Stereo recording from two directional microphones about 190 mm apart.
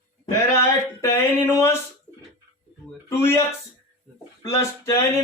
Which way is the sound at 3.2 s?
15° left (ahead or behind).